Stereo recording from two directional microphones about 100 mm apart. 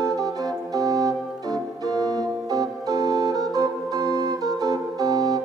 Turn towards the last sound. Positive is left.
turn(degrees=-40)  # may be behind; listen again after turning